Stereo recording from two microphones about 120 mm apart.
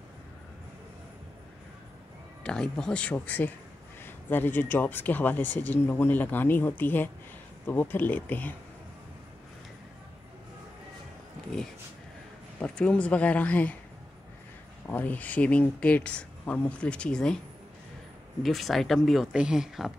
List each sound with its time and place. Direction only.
2.4 s speech: 5° left (ahead or behind)
12.5 s speech: 10° left (ahead or behind)
14.9 s speech: 15° left (ahead or behind)
18.4 s speech: centre (ahead or behind)